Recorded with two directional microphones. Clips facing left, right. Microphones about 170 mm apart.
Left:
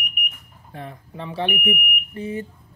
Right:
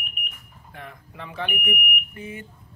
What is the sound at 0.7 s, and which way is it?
Speech, 35° left (ahead or behind).